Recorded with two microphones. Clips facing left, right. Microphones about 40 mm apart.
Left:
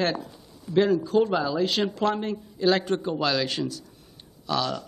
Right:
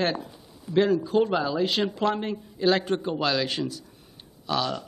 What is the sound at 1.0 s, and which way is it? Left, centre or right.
A man's voice, centre.